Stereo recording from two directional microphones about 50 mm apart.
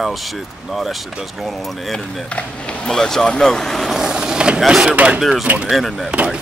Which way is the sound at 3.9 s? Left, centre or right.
Centre.